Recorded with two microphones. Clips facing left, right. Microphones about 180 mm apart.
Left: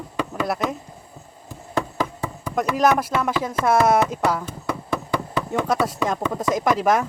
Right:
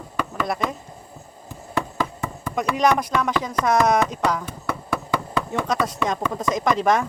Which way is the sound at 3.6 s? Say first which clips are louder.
Left 1 dB; 5° left (ahead or behind).